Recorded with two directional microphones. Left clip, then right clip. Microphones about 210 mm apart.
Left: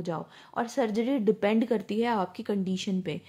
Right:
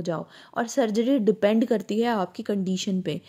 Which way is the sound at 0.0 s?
20° right (ahead or behind).